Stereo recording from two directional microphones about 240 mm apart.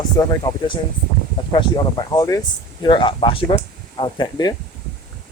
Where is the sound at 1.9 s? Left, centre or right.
Centre.